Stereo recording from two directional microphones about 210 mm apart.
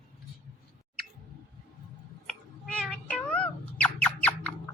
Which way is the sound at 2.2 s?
5° left (ahead or behind).